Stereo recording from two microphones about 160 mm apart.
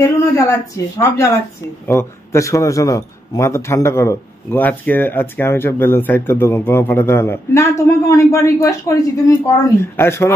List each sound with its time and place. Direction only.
0.0 s a man's voice: 20° left (ahead or behind)